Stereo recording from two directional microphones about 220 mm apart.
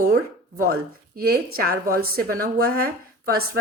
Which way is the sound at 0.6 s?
40° right (ahead or behind).